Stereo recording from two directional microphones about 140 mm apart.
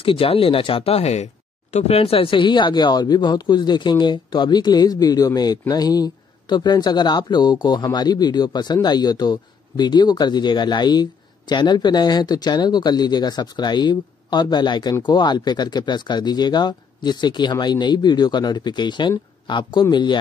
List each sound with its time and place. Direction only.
0.0 s speech: 40° left (ahead or behind)